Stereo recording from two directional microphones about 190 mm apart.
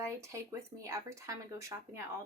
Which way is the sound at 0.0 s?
15° right (ahead or behind).